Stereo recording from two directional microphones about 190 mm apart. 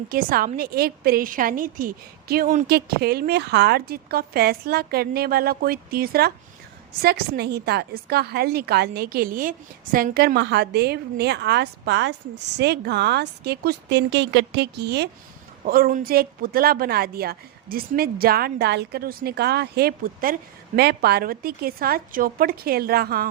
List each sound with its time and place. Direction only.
0.1 s a woman's voice: 50° right (ahead or behind)
2.6 s a woman's voice: 55° right (ahead or behind)